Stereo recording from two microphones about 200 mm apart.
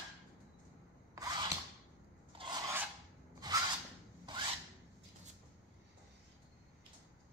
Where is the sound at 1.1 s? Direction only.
15° right (ahead or behind).